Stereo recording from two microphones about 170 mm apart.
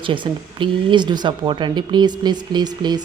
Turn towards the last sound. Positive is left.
turn(degrees=-25)  # may be behind; listen again after turning